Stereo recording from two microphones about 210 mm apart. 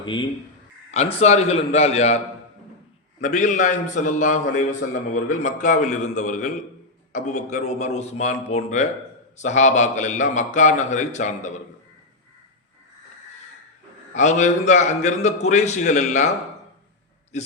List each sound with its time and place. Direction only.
0.0 s a man's voice: 20° left (ahead or behind)
3.2 s a man's voice: 35° left (ahead or behind)
14.1 s a man's voice: 35° left (ahead or behind)